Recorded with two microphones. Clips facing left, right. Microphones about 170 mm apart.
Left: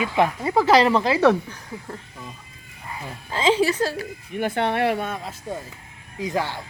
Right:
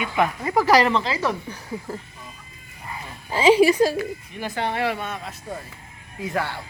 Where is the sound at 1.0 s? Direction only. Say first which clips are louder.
Left 8 dB; 60° left (ahead or behind).